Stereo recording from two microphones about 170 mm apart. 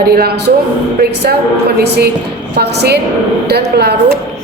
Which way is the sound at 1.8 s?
70° right (ahead or behind).